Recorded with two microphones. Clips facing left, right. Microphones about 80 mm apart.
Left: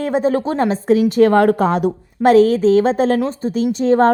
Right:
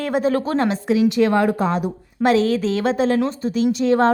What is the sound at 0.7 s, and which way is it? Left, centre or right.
A woman's voice, left.